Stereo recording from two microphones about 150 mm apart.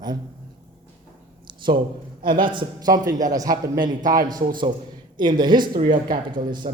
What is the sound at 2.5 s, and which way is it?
A man's voice, 25° right (ahead or behind).